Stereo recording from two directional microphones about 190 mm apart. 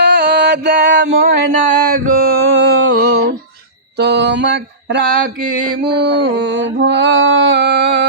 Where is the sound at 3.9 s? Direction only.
60° right (ahead or behind).